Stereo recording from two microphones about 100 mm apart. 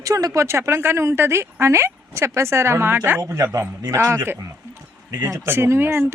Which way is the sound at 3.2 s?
30° right (ahead or behind).